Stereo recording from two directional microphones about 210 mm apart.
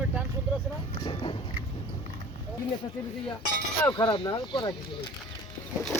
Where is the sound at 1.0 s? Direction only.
25° left (ahead or behind).